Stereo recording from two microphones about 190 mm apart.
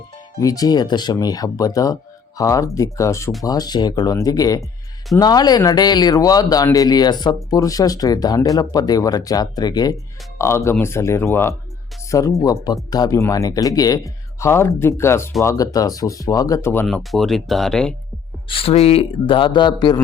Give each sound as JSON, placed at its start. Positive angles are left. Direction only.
{"t": 0.3, "sound": "speech", "side_deg": 20}
{"t": 16.8, "sound": "speech", "side_deg": 0}
{"t": 18.4, "sound": "speech", "side_deg": 30}